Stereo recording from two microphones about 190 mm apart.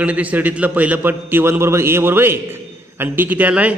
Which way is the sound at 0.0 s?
10° right (ahead or behind).